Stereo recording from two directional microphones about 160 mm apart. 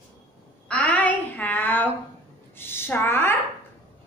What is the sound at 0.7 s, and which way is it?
A child's voice, 10° left (ahead or behind).